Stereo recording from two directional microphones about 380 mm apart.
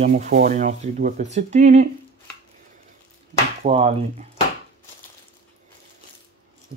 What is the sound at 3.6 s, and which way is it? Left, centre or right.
Speech, centre.